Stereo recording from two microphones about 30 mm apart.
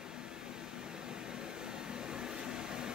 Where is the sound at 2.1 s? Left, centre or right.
Right.